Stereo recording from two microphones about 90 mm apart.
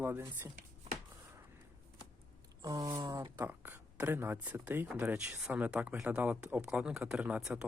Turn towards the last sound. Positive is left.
turn(degrees=-5)  # may be behind; listen again after turning